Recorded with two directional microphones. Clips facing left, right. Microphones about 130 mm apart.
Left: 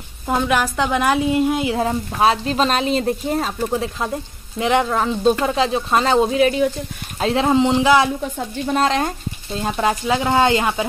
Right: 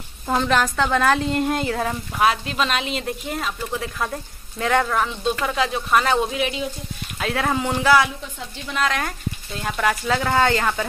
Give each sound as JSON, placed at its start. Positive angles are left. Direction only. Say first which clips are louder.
{"t": 0.3, "sound": "a woman's voice", "louder": "left 1 dB", "side_deg": 10}
{"t": 1.8, "sound": "a woman's voice", "louder": "left 3 dB", "side_deg": 30}
{"t": 6.4, "sound": "speech", "louder": "left 9 dB", "side_deg": 45}
{"t": 7.2, "sound": "speech", "louder": "left 7 dB", "side_deg": 25}
{"t": 8.2, "sound": "speech", "louder": "left 10 dB", "side_deg": 45}